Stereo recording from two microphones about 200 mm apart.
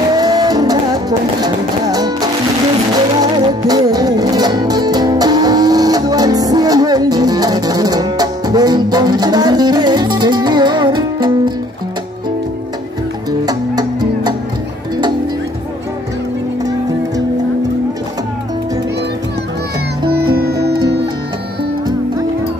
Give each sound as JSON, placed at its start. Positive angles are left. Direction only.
{"t": 0.1, "sound": "music", "side_deg": -20}
{"t": 13.3, "sound": "music", "side_deg": -20}
{"t": 20.3, "sound": "music", "side_deg": -50}